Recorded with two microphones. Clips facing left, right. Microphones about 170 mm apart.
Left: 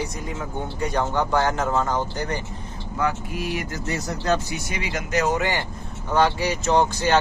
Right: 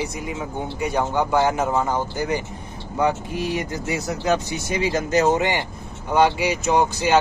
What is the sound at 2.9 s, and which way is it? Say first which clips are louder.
Speech: right 4 dB; 20° right (ahead or behind).